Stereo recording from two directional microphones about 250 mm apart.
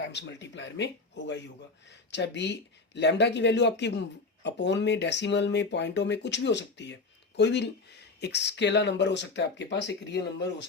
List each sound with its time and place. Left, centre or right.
0.0 s speech: left